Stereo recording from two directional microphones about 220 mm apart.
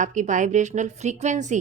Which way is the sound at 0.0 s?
35° right (ahead or behind).